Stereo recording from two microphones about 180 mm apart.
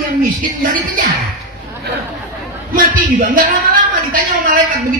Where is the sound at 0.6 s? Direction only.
55° right (ahead or behind).